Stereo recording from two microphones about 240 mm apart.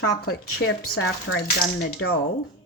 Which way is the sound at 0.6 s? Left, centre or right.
Left.